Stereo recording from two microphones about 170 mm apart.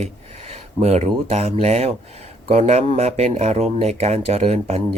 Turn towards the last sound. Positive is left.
turn(degrees=-40)  # may be behind; listen again after turning